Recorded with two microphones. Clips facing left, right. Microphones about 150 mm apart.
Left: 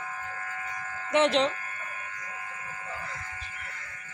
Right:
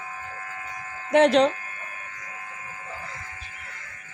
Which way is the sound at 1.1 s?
40° right (ahead or behind).